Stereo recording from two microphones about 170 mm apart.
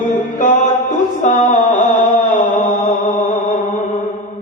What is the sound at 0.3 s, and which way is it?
Music, 45° left (ahead or behind).